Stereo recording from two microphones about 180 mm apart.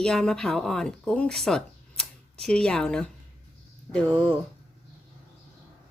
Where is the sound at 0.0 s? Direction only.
5° left (ahead or behind).